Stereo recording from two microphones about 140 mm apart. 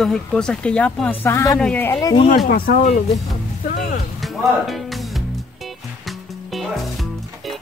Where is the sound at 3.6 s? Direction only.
70° left (ahead or behind).